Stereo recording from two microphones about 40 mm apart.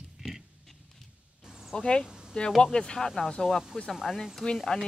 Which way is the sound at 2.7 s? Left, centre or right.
Centre.